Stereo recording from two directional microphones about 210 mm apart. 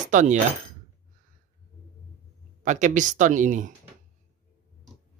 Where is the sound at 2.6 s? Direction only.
35° right (ahead or behind).